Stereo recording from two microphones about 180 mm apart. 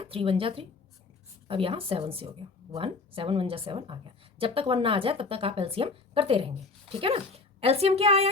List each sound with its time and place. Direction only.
0.0 s a woman's voice: 30° right (ahead or behind)